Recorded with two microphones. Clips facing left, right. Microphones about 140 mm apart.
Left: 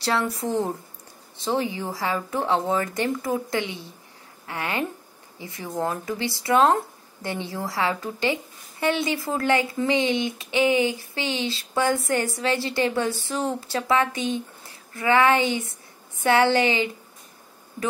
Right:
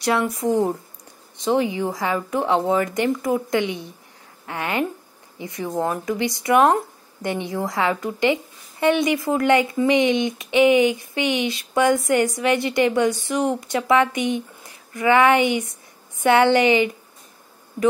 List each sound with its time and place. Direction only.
0.0 s speech: 15° right (ahead or behind)